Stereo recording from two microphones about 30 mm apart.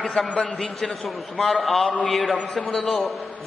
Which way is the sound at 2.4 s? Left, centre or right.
Centre.